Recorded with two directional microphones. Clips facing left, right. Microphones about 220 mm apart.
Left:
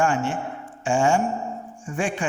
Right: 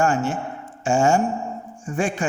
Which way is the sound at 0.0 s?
40° right (ahead or behind).